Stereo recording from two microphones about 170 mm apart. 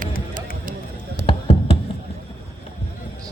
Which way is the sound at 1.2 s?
80° right.